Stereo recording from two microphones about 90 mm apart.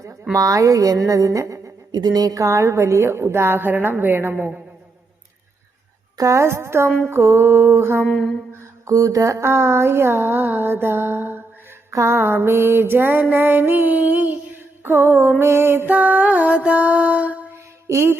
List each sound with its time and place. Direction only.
0.3 s speech: 40° right (ahead or behind)
1.9 s a woman's voice: 50° right (ahead or behind); by 4.6 s 15° right (ahead or behind)
6.1 s a woman's voice: 35° right (ahead or behind)
8.0 s a sound: 10° left (ahead or behind)
8.9 s a woman's voice: 35° right (ahead or behind); by 15.3 s 20° right (ahead or behind)
15.4 s music: 25° right (ahead or behind)
17.8 s music: 30° right (ahead or behind)